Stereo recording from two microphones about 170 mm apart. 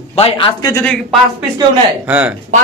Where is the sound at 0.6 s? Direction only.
20° left (ahead or behind).